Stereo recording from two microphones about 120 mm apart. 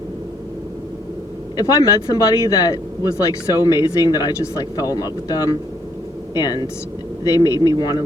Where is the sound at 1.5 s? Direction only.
30° left (ahead or behind).